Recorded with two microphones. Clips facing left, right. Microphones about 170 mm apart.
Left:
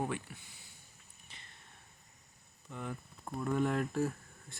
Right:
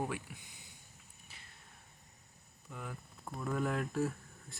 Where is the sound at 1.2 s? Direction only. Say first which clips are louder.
Left 1 dB; 5° right (ahead or behind).